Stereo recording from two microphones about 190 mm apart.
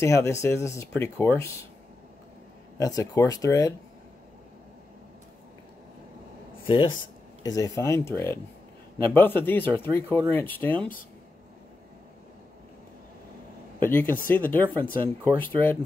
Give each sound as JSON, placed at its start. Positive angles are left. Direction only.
{"t": 0.0, "sound": "speech", "side_deg": 15}
{"t": 2.8, "sound": "speech", "side_deg": 15}
{"t": 6.7, "sound": "speech", "side_deg": 25}
{"t": 13.7, "sound": "speech", "side_deg": 10}